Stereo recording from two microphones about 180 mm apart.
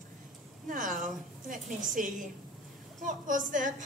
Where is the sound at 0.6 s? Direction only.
45° right (ahead or behind).